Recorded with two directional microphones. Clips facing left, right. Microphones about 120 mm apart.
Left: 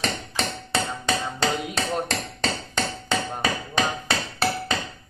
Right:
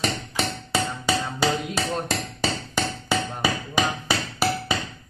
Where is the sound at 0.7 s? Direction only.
5° right (ahead or behind).